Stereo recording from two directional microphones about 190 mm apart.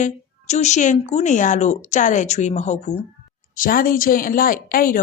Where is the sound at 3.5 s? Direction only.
50° left (ahead or behind).